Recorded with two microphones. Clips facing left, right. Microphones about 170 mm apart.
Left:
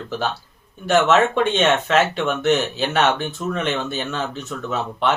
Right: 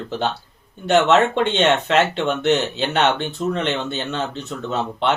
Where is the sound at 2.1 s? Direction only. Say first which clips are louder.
Even; 20° right (ahead or behind).